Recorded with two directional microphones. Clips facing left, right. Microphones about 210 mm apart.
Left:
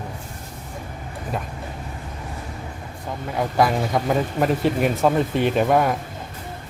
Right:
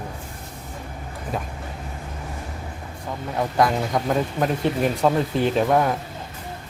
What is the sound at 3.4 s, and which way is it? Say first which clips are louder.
Speech: left 1 dB; 5° left (ahead or behind).